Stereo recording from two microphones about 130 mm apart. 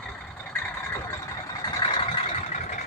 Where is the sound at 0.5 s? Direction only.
20° left (ahead or behind).